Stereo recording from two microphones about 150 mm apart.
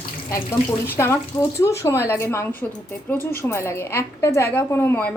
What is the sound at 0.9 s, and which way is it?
A woman's voice, 15° left (ahead or behind).